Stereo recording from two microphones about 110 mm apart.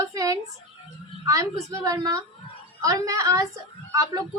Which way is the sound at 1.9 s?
35° right (ahead or behind).